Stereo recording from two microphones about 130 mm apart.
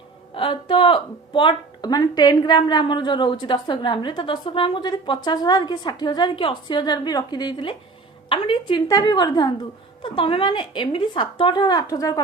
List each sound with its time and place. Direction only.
0.3 s a woman's voice: 40° left (ahead or behind)
8.9 s a woman's voice: 30° left (ahead or behind)
10.0 s a woman's voice: 45° left (ahead or behind); by 12.2 s 25° left (ahead or behind)